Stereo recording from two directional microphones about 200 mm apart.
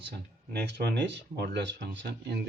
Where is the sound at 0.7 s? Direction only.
60° right (ahead or behind).